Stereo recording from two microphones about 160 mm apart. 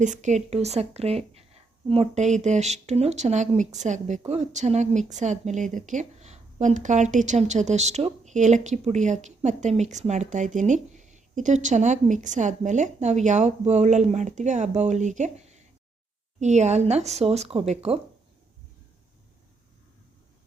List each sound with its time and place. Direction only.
0.0 s a woman's voice: 50° right (ahead or behind)